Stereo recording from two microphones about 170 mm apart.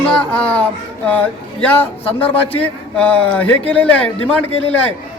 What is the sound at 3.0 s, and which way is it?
A man's voice, 10° left (ahead or behind).